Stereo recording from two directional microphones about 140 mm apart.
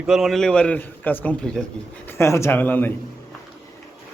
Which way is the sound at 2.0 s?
20° left (ahead or behind).